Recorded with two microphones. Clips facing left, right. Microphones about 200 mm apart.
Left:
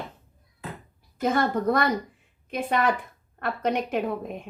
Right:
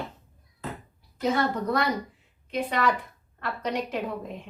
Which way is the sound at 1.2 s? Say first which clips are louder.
Left 2 dB; 50° left (ahead or behind).